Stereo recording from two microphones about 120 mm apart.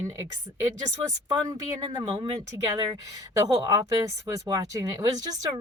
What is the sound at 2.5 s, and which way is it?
Speech, 30° right (ahead or behind).